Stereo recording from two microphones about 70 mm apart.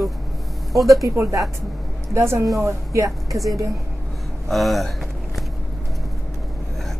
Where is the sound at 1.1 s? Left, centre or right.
Right.